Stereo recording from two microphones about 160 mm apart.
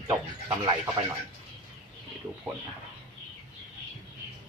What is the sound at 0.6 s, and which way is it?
Speech, 20° right (ahead or behind).